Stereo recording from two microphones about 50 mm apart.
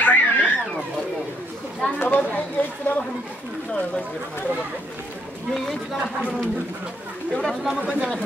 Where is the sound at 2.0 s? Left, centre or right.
Left.